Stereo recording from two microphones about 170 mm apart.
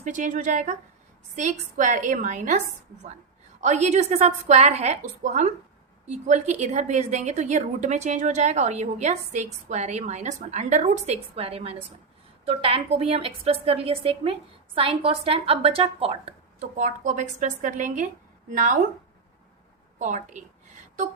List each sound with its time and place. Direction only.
0.0 s a woman's voice: 50° right (ahead or behind)
3.6 s a woman's voice: 40° right (ahead or behind)
16.7 s a woman's voice: 50° right (ahead or behind)
20.0 s a woman's voice: 45° right (ahead or behind)